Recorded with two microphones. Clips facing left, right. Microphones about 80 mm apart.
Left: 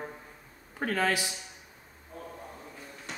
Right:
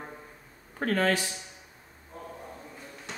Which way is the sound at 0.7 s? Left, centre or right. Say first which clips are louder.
Right 2 dB; centre.